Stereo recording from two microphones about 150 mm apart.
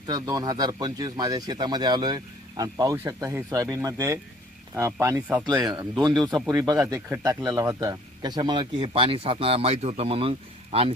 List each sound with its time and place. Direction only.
0.1 s speech: 25° right (ahead or behind); by 10.9 s 40° right (ahead or behind)